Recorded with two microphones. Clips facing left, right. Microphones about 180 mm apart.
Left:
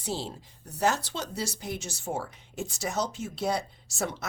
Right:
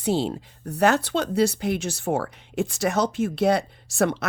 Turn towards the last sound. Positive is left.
turn(degrees=-65)  # may be behind; listen again after turning